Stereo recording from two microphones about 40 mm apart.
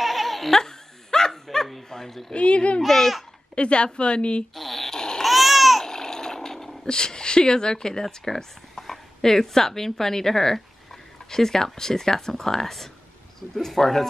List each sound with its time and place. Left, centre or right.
0.0 s laughter: centre
0.6 s dog: centre
1.9 s speech: centre
2.3 s a woman's voice: left
2.8 s speech: centre
3.5 s a woman's voice: left
4.6 s dog: centre
4.9 s babbling: centre
5.2 s babbling: centre
5.9 s water: centre
6.9 s speech: centre